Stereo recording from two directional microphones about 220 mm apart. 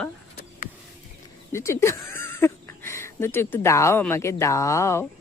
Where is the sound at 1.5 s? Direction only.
10° left (ahead or behind).